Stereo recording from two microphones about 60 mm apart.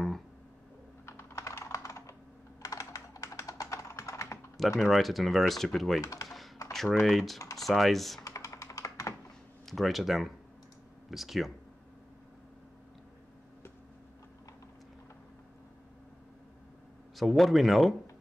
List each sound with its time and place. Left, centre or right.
1.0 s computer keyboard: left
4.7 s speech: centre
5.9 s speech: left
6.2 s typing: centre
6.7 s speech: centre
8.2 s computer keyboard: left
9.7 s speech: centre
17.2 s speech: centre